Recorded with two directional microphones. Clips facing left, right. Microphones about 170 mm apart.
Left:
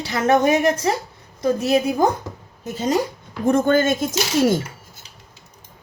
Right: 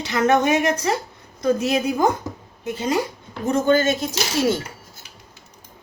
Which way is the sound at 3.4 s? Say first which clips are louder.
Left 1 dB; 55° left (ahead or behind).